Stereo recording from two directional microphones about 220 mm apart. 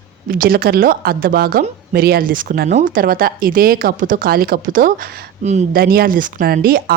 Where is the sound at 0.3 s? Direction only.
40° right (ahead or behind).